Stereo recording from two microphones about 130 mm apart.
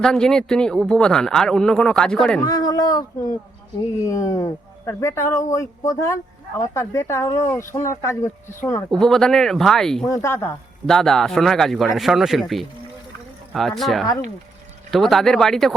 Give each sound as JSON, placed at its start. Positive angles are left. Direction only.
{"t": 0.0, "sound": "a man's voice", "side_deg": 5}
{"t": 2.5, "sound": "speech", "side_deg": 30}
{"t": 8.9, "sound": "a man's voice", "side_deg": 5}
{"t": 10.1, "sound": "speech", "side_deg": 20}
{"t": 10.8, "sound": "a man's voice", "side_deg": 5}